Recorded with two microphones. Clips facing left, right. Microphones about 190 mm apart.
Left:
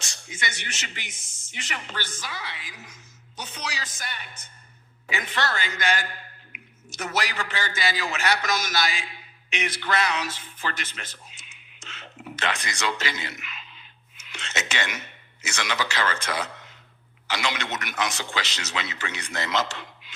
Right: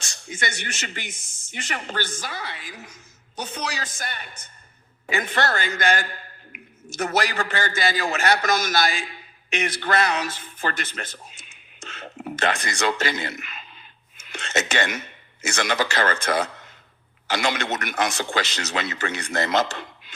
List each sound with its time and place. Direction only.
0.0 s a man's voice: 50° right (ahead or behind)
14.2 s a sound: 50° right (ahead or behind)
15.4 s speech: 50° right (ahead or behind)